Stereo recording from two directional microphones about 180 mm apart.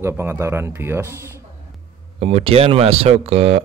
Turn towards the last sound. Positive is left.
turn(degrees=-35)  # may be behind; listen again after turning